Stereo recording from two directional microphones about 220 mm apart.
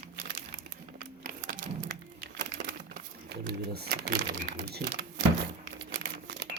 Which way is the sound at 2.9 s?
50° right (ahead or behind).